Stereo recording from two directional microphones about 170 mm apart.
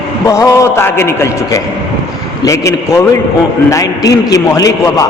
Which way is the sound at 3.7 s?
20° left (ahead or behind).